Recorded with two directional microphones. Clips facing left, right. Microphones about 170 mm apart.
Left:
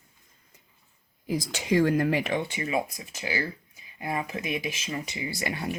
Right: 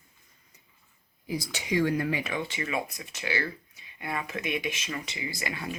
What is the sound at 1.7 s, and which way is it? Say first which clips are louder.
Speech: left 4 dB; 45° left (ahead or behind).